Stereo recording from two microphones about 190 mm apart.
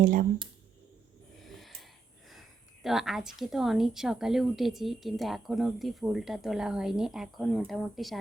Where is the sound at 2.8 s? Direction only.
Centre (ahead or behind).